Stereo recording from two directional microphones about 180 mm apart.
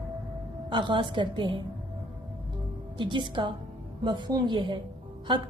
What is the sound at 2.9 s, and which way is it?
A woman's voice, 25° right (ahead or behind).